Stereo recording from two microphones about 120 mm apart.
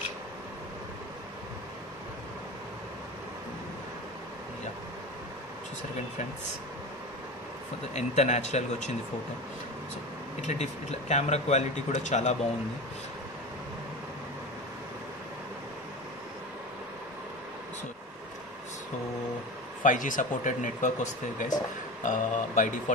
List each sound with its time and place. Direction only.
7.9 s speech: 70° left (ahead or behind)
10.4 s speech: 70° left (ahead or behind)
19.8 s speech: 90° left